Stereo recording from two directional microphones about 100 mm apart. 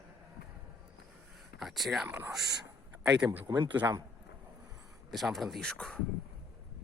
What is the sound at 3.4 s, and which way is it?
Speech, 45° right (ahead or behind).